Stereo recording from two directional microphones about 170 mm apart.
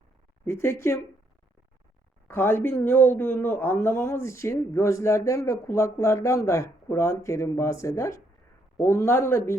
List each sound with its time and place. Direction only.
0.4 s speech: 15° left (ahead or behind)
2.2 s speech: 15° left (ahead or behind)